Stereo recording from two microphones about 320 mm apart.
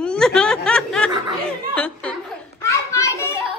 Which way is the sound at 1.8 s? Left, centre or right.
Centre.